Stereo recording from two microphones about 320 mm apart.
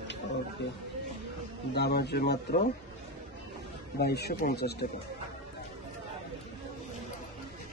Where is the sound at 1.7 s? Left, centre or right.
Left.